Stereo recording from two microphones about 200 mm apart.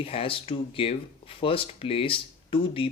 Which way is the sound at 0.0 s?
25° left (ahead or behind).